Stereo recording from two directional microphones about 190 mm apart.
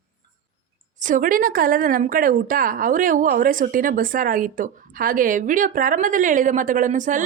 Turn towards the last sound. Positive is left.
turn(degrees=-40)  # may be behind; listen again after turning